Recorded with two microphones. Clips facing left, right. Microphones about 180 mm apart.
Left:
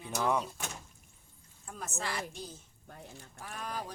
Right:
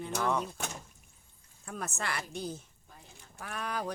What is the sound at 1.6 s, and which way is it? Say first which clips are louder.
A woman's voice: right 2 dB; 65° right (ahead or behind).